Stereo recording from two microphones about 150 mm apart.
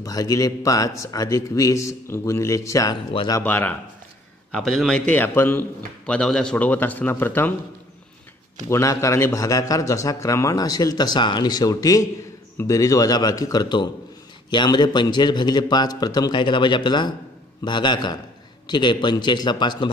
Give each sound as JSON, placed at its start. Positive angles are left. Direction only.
{"t": 0.0, "sound": "a man's voice", "side_deg": 25}
{"t": 3.4, "sound": "a man's voice", "side_deg": 10}
{"t": 8.6, "sound": "a man's voice", "side_deg": 20}